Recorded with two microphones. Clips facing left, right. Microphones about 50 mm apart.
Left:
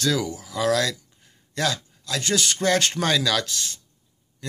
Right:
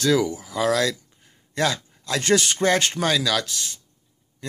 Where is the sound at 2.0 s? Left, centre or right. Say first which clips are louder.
Right 4 dB; right; by 3.8 s centre.